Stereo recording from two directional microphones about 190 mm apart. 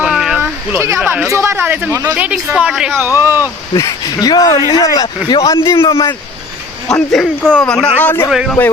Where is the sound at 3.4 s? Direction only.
15° left (ahead or behind).